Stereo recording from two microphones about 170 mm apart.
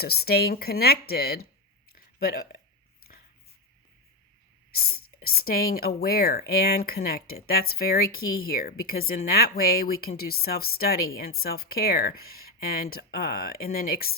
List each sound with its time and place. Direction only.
0.0 s speech: 65° left (ahead or behind)
1.9 s a sound: 60° left (ahead or behind)
4.7 s speech: 60° left (ahead or behind)